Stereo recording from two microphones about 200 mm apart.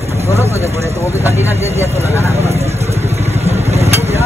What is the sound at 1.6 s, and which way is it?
Speech, 30° right (ahead or behind).